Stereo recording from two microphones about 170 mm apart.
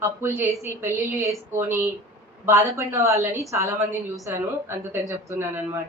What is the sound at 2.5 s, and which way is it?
A woman's voice, 15° right (ahead or behind).